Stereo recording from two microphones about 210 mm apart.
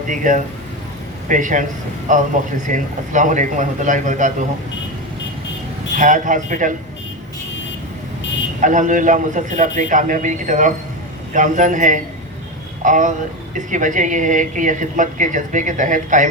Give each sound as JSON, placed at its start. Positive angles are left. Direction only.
{"t": 0.1, "sound": "a woman's voice", "side_deg": -40}
{"t": 6.0, "sound": "a woman's voice", "side_deg": -40}
{"t": 8.6, "sound": "a woman's voice", "side_deg": -35}